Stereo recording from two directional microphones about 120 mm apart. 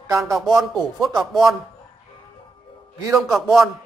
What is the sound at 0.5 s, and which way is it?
Speech, centre (ahead or behind).